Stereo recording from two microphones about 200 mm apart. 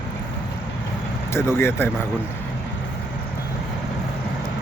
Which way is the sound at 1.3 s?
10° left (ahead or behind).